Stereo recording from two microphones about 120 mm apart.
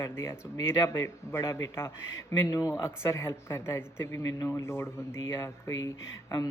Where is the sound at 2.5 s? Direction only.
30° left (ahead or behind).